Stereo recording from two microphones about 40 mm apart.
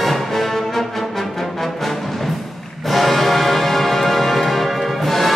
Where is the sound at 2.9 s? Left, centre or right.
Centre.